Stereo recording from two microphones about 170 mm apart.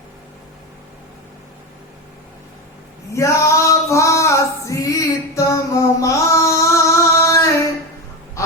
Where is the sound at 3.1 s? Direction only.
15° left (ahead or behind).